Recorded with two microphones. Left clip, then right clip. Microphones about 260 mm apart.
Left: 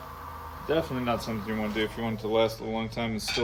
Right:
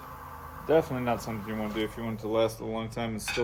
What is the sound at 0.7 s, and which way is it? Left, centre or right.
Speech, centre.